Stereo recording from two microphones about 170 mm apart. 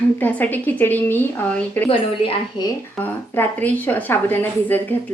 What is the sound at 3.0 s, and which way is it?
A woman's voice, 10° left (ahead or behind).